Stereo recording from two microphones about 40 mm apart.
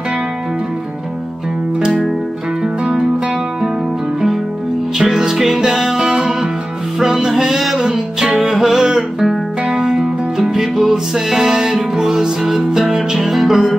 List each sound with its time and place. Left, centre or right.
2.8 s music: centre
4.9 s music: centre